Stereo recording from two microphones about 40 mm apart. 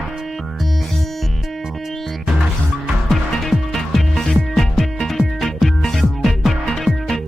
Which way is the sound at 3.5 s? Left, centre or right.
Centre.